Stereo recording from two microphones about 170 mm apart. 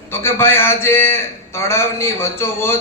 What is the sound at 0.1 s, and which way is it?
A man's voice, 15° left (ahead or behind).